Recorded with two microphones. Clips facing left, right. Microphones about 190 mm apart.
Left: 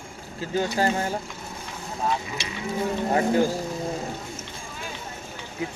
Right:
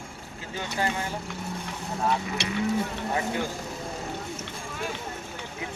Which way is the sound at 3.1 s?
40° left (ahead or behind).